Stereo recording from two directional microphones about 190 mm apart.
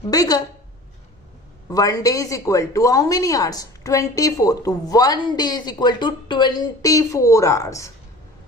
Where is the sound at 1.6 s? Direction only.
20° left (ahead or behind).